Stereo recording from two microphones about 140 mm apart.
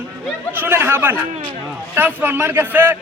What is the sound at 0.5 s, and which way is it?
A man's voice, 15° right (ahead or behind).